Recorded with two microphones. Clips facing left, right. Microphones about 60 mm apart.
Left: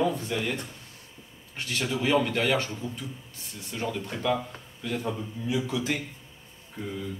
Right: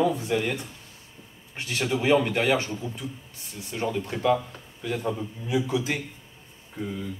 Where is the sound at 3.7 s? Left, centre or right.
Centre.